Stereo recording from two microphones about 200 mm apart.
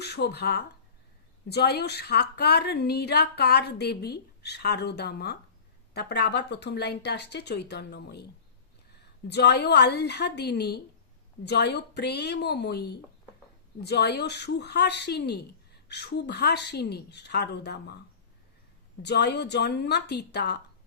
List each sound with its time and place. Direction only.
0.0 s a woman's voice: 55° left (ahead or behind)
19.0 s speech: 55° left (ahead or behind)